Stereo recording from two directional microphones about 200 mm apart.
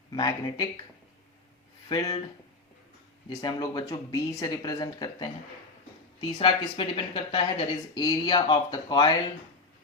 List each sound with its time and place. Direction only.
0.1 s speech: 20° left (ahead or behind)
1.9 s speech: 20° left (ahead or behind)
3.2 s speech: 20° left (ahead or behind)